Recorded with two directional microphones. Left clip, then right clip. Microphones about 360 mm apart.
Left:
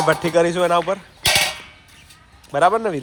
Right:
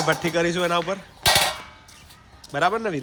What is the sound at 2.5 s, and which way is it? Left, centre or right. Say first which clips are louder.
Speech: left 6 dB; centre.